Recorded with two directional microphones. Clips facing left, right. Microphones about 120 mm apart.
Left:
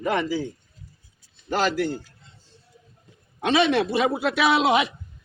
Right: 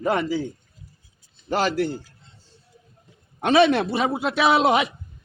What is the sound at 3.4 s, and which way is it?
Speech, 45° right (ahead or behind).